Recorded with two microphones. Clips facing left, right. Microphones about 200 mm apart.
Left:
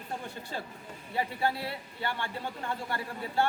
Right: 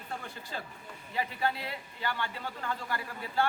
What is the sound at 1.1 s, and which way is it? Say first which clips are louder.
A man's voice: left 2 dB; 30° left (ahead or behind).